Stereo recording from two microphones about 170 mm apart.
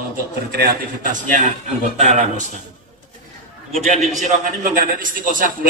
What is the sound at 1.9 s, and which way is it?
Mantra, 45° right (ahead or behind).